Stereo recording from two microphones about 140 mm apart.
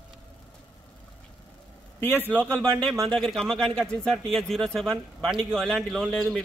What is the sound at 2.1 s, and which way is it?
Speech, 15° right (ahead or behind).